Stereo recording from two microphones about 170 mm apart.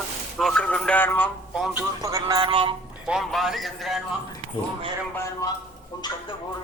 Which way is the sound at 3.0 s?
Centre (ahead or behind).